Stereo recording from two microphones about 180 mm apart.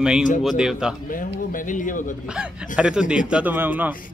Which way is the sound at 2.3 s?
5° right (ahead or behind).